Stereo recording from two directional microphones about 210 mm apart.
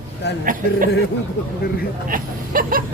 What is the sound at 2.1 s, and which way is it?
Speech, 40° right (ahead or behind).